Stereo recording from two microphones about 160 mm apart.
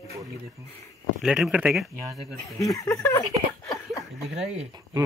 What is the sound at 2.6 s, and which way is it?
Speech, 20° left (ahead or behind).